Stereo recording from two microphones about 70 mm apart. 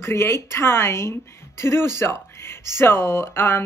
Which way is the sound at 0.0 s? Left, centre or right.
Left.